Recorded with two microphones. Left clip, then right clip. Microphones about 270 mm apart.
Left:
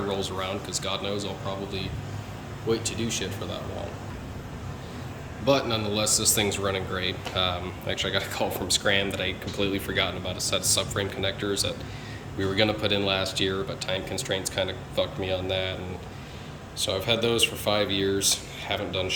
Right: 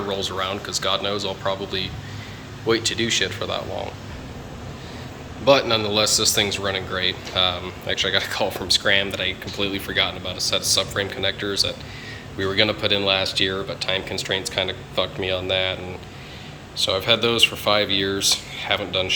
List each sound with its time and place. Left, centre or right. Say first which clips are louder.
0.1 s speech: right 5 dB; centre
5.5 s a man's voice: right 7 dB; centre